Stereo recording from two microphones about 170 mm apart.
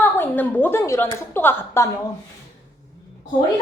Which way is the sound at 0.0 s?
10° left (ahead or behind).